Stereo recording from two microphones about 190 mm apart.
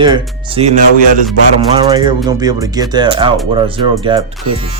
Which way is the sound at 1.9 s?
20° right (ahead or behind).